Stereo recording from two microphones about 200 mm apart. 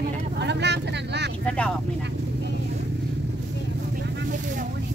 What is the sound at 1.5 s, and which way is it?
Speech, 5° left (ahead or behind).